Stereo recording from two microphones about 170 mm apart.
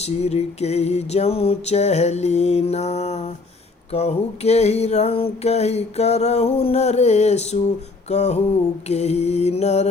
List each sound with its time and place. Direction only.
0.0 s music: 40° left (ahead or behind)